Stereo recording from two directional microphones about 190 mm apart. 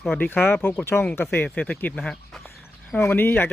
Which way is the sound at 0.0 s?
5° left (ahead or behind).